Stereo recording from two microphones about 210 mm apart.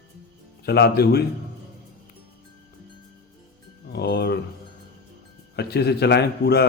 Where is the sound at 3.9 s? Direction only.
50° left (ahead or behind).